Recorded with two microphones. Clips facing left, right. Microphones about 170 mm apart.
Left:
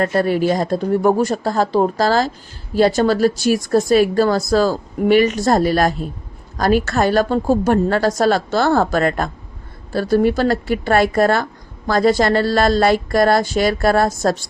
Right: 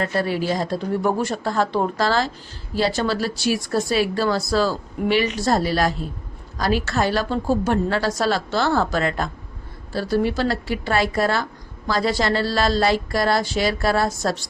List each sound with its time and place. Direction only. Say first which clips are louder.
0.0 s speech: left 6 dB; 50° left (ahead or behind)